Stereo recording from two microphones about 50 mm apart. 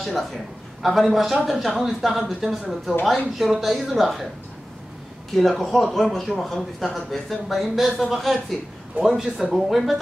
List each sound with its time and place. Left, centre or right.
0.0 s speech: centre
5.3 s speech: centre
9.0 s speech: centre
9.5 s speech: centre